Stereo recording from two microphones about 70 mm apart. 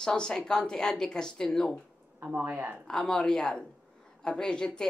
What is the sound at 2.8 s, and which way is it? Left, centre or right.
A woman's voice, centre.